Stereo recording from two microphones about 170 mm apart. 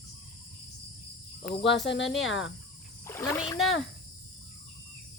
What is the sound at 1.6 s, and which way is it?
Speech, 90° left.